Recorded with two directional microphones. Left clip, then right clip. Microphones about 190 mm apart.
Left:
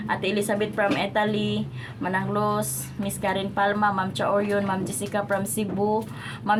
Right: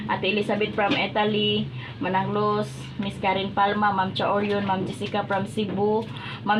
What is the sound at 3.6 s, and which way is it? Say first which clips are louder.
A woman's voice: right 1 dB; 35° left (ahead or behind).